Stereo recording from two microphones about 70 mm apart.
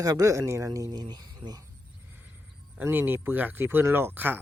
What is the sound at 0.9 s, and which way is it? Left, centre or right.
Speech, right.